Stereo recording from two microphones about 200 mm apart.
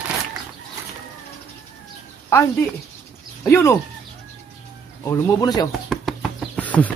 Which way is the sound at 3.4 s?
15° left (ahead or behind).